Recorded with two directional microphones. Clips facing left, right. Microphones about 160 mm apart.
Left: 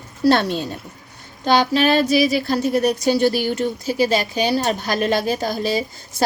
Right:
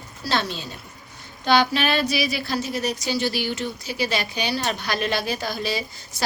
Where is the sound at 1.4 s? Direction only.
40° left (ahead or behind).